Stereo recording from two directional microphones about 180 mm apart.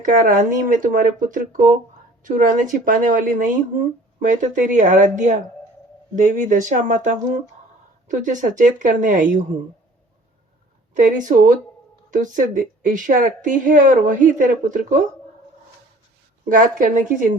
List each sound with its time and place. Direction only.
0.0 s a woman's voice: 45° right (ahead or behind)
10.9 s a woman's voice: 45° right (ahead or behind)
16.5 s a woman's voice: 45° right (ahead or behind)